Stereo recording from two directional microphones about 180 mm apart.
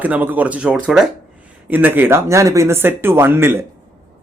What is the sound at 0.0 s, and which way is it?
Speech, 10° right (ahead or behind).